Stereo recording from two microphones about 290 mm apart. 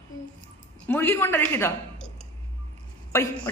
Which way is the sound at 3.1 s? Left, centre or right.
Centre.